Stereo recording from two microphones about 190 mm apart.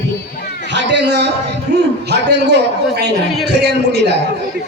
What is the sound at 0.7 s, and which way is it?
A man's voice, 70° right (ahead or behind).